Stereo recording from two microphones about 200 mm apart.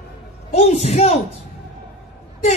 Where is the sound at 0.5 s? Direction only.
35° left (ahead or behind).